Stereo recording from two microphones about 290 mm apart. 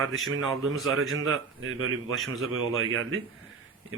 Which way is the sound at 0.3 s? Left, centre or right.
Right.